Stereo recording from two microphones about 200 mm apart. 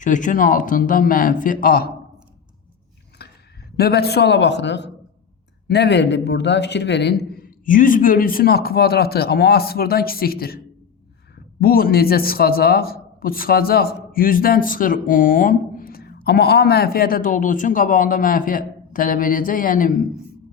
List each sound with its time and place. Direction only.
0.0 s speech: 40° left (ahead or behind)
3.2 s a sound: 55° left (ahead or behind)
3.8 s a man's voice: 50° left (ahead or behind)
11.6 s a man's voice: 45° left (ahead or behind)